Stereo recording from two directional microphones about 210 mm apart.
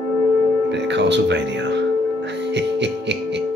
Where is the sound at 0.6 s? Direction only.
55° right (ahead or behind).